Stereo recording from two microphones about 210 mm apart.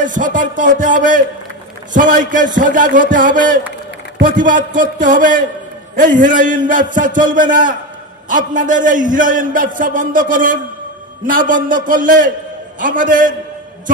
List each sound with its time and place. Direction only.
0.0 s a man's voice: 40° right (ahead or behind)